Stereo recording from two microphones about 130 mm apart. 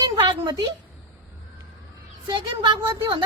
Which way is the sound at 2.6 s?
40° right (ahead or behind).